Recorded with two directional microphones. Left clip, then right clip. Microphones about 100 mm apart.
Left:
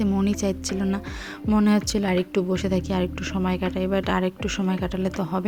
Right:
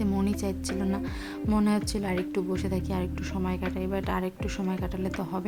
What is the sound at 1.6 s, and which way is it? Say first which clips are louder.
A woman's voice: left 6 dB; 40° left (ahead or behind).